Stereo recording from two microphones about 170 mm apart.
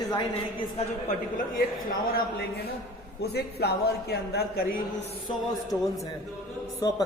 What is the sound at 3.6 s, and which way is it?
Speech, 70° left (ahead or behind).